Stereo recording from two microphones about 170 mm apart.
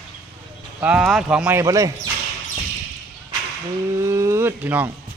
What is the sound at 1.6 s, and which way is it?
Speech, 20° right (ahead or behind).